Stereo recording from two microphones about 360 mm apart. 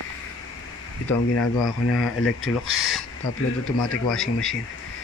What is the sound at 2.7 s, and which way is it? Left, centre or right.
Speech, centre.